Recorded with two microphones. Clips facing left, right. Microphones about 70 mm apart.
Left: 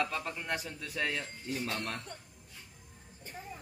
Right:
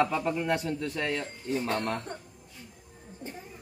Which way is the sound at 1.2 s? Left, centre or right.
Right.